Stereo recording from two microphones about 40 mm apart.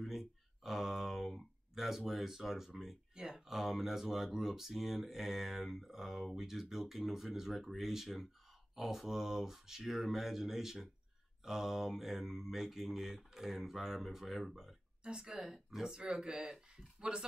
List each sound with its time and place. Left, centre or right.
0.0 s speech: centre
15.0 s speech: right
15.4 s speech: centre; by 17.2 s right